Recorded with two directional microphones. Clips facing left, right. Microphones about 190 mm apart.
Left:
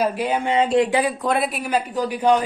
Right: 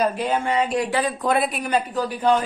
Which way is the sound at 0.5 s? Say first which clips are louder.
Left 4 dB; 25° left (ahead or behind).